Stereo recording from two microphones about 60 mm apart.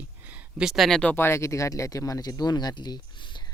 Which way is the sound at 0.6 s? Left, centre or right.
Centre.